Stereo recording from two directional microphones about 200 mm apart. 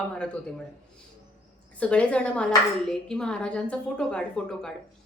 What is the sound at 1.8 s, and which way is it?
A woman's voice, 5° left (ahead or behind).